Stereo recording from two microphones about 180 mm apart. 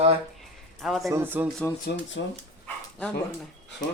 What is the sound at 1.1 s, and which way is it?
Speech, 10° right (ahead or behind).